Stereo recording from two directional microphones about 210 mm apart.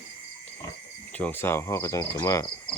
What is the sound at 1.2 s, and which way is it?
Cricket, 10° left (ahead or behind).